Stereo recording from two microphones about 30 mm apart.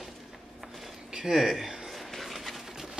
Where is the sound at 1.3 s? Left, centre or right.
Centre.